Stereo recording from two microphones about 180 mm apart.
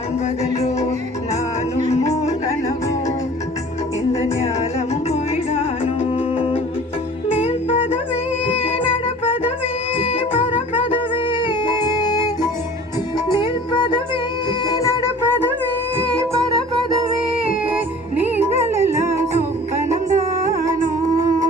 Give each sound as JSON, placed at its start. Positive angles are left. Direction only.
{"t": 1.9, "sound": "music", "side_deg": 40}
{"t": 4.1, "sound": "music", "side_deg": 40}
{"t": 18.3, "sound": "music", "side_deg": -15}